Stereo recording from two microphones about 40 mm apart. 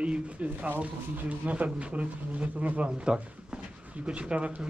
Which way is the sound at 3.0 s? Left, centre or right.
Right.